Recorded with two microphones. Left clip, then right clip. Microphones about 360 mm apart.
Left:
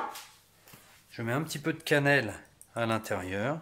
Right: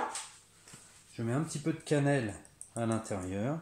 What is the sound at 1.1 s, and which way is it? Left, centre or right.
Speech, left.